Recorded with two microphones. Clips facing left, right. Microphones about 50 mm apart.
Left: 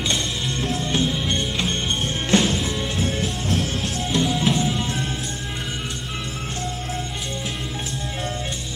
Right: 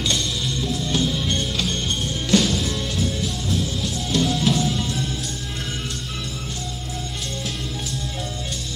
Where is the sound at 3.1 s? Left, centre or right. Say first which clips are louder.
Left 1 dB; left.